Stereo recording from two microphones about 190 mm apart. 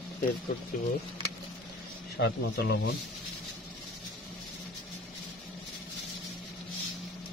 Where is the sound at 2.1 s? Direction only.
60° left (ahead or behind).